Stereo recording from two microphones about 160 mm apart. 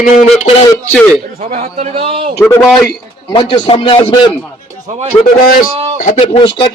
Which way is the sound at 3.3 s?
30° left (ahead or behind).